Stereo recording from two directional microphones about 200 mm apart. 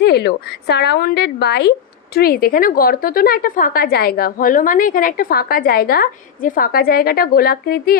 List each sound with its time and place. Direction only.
0.0 s a woman's voice: 55° left (ahead or behind)